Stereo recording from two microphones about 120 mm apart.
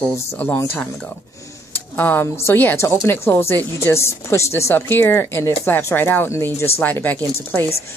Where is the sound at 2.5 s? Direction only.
20° left (ahead or behind).